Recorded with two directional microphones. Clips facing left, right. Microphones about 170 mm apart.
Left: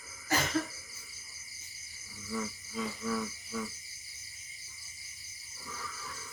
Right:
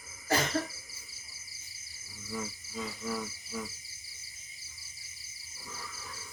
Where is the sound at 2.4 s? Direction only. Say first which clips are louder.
Left 2 dB; 10° right (ahead or behind).